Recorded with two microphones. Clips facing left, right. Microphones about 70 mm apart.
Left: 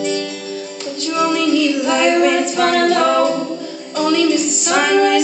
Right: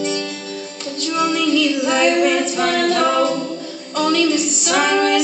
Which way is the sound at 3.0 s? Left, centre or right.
Centre.